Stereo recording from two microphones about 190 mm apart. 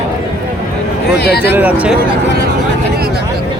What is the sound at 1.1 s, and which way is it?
Speech, 60° left (ahead or behind).